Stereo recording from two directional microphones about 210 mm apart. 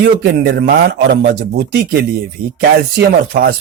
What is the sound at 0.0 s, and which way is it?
Speech, 50° right (ahead or behind).